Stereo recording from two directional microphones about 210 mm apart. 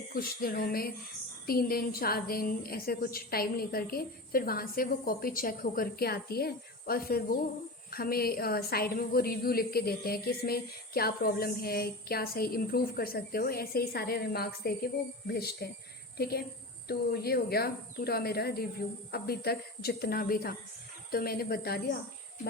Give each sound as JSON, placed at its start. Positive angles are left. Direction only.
{"t": 0.1, "sound": "a woman's voice", "side_deg": 45}